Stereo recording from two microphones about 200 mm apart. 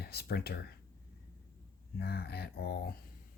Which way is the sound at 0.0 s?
50° left (ahead or behind).